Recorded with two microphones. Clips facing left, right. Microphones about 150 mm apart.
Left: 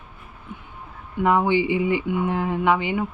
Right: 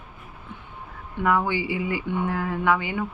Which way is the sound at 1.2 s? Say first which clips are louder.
Left 4 dB; 20° left (ahead or behind).